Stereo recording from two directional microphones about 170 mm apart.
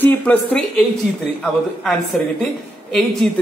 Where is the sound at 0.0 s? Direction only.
10° left (ahead or behind).